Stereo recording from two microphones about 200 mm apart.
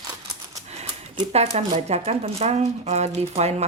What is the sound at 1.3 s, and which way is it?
Speech, 35° right (ahead or behind).